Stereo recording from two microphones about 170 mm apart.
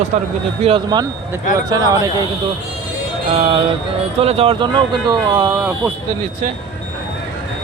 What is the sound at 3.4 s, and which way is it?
Speech, 30° right (ahead or behind).